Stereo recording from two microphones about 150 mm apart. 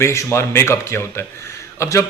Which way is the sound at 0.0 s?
20° left (ahead or behind).